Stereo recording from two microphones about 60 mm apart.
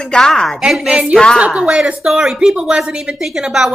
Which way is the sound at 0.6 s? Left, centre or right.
Centre.